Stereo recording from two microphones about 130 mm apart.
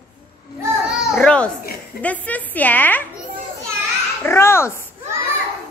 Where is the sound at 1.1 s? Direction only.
5° left (ahead or behind).